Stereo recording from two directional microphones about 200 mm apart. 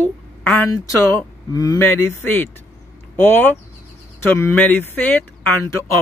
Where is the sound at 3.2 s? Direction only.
10° left (ahead or behind).